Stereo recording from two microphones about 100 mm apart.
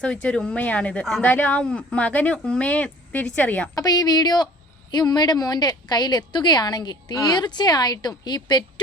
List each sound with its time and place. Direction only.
0.0 s speech: 10° left (ahead or behind)
3.8 s a woman's voice: 40° left (ahead or behind)